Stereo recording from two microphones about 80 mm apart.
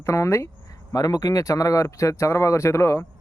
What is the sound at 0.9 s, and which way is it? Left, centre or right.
A man's voice, left.